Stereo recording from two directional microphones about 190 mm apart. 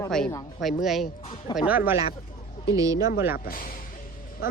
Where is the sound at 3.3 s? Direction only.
50° left (ahead or behind).